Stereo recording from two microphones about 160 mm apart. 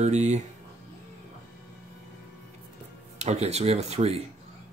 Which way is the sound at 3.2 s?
45° right (ahead or behind).